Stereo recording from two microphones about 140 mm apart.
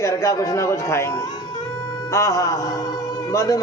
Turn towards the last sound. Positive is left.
turn(degrees=25)  # may be behind; listen again after turning